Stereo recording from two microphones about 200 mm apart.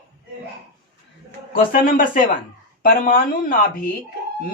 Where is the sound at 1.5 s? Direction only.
45° left (ahead or behind).